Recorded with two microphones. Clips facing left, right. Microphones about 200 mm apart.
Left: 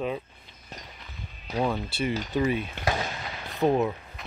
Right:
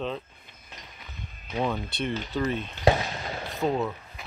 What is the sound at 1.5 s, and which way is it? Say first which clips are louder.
Speech: left 1 dB; 5° left (ahead or behind).